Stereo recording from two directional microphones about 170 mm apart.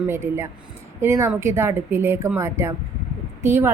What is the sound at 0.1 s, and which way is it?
A woman's voice, 15° right (ahead or behind).